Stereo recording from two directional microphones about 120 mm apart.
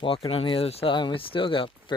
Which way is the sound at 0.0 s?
50° left (ahead or behind).